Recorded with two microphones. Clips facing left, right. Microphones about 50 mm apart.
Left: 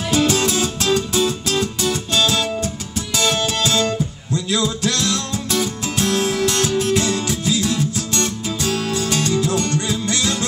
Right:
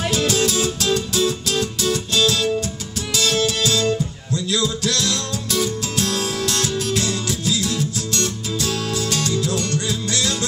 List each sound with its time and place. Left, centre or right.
0.3 s music: left